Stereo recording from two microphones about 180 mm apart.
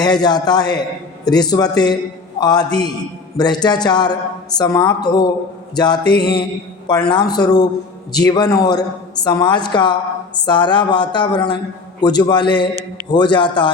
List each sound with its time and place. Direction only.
0.0 s speech: 20° left (ahead or behind)